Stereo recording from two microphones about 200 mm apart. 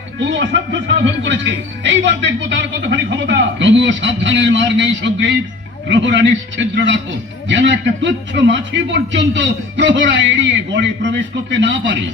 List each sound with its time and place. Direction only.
0.2 s a man's voice: 65° right (ahead or behind)